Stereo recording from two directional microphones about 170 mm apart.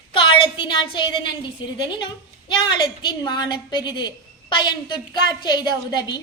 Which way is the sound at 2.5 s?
25° left (ahead or behind).